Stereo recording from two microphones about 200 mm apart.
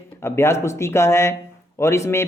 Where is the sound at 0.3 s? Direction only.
15° left (ahead or behind).